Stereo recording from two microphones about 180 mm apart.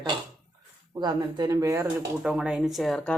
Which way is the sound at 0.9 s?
20° right (ahead or behind).